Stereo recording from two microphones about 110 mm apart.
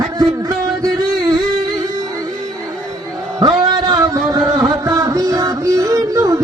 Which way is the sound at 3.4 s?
35° right (ahead or behind).